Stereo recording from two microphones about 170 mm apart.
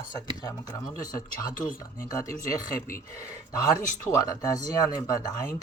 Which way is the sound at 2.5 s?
55° left (ahead or behind).